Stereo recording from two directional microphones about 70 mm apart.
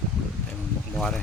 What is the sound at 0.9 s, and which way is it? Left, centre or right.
Speech, centre.